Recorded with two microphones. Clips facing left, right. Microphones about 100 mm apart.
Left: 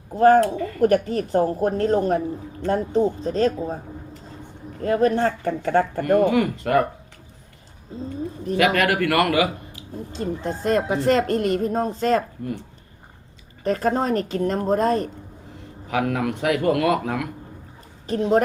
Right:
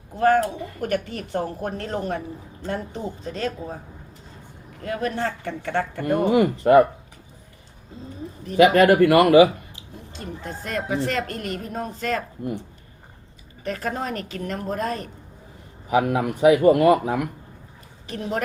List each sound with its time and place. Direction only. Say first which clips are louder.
0.1 s speech: left 4 dB; 35° left (ahead or behind)
0.4 s speech: left 5 dB; 15° right (ahead or behind)
0.8 s speech: left 8 dB; 40° left (ahead or behind)
4.8 s speech: left 7 dB; 35° left (ahead or behind)
6.1 s speech: even; 20° right (ahead or behind)
8.5 s a man's voice: right 5 dB; 20° right (ahead or behind)
10.2 s speech: left 7 dB; 35° left (ahead or behind)
13.7 s speech: left 6 dB; 35° left (ahead or behind)
15.9 s speech: right 2 dB; 15° right (ahead or behind)
18.2 s speech: left 8 dB; 35° left (ahead or behind)